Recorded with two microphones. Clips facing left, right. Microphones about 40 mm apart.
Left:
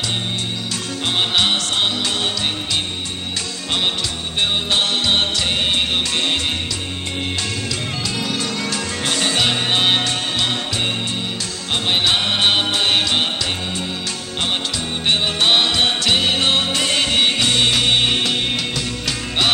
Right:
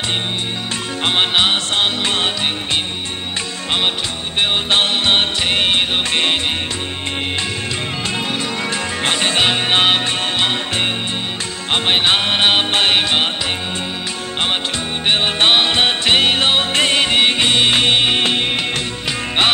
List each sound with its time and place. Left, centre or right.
1.0 s music: right
4.4 s music: right
9.0 s music: right
15.1 s music: right
17.0 s music: right